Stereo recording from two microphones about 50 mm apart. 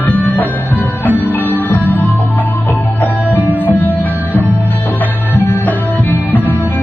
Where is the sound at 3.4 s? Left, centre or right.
Right.